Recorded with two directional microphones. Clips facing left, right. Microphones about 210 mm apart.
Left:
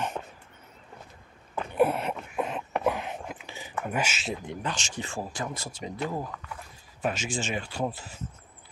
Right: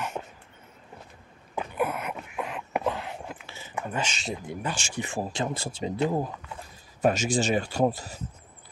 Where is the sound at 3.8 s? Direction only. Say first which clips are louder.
Left 1 dB; 10° left (ahead or behind).